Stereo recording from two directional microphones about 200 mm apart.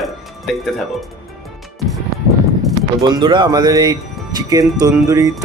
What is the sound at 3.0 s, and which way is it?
A woman's voice, 20° right (ahead or behind).